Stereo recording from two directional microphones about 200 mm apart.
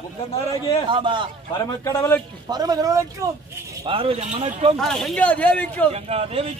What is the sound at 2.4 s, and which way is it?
A man's voice, 20° right (ahead or behind).